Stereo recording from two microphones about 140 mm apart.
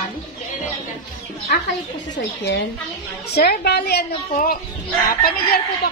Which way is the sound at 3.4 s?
90° left.